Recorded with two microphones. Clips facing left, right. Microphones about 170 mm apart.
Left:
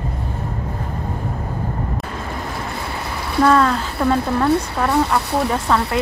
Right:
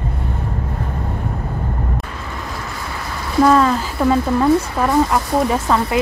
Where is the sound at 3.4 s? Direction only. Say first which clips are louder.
Right 2 dB; 10° right (ahead or behind).